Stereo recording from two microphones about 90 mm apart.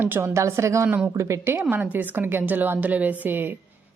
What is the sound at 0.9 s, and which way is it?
Speech, 20° right (ahead or behind).